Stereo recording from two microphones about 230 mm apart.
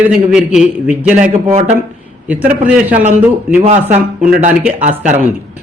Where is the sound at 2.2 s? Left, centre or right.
Centre.